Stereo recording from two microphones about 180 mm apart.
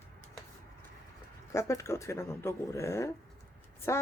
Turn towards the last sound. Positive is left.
turn(degrees=15)  # may be behind; listen again after turning